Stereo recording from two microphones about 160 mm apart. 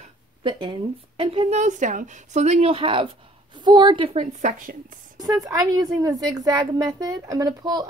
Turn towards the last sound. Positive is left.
turn(degrees=-25)  # may be behind; listen again after turning